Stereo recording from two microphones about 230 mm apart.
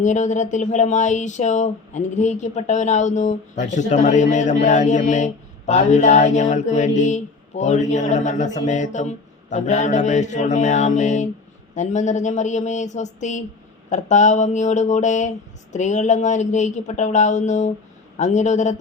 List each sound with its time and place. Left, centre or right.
0.0 s speech: left